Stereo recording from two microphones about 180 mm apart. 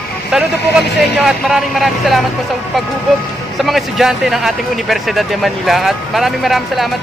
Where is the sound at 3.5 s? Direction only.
Centre (ahead or behind).